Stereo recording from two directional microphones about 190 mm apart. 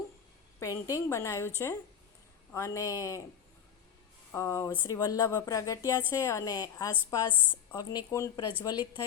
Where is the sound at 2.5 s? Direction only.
15° left (ahead or behind).